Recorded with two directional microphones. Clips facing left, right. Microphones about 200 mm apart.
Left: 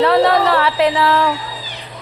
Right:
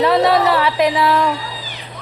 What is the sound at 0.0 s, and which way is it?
A woman's voice, 15° right (ahead or behind).